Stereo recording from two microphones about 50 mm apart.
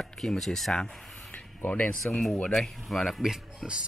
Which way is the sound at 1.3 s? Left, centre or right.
Left.